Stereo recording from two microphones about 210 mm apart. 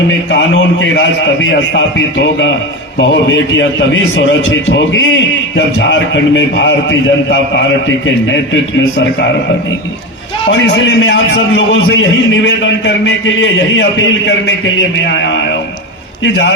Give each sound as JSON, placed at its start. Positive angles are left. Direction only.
{"t": 0.3, "sound": "a man's voice", "side_deg": 60}
{"t": 10.5, "sound": "a man's voice", "side_deg": 65}